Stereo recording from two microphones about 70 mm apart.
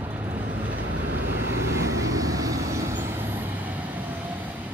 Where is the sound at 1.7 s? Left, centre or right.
Right.